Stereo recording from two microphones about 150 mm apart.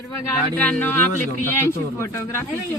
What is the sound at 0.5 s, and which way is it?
A man's voice, 10° left (ahead or behind).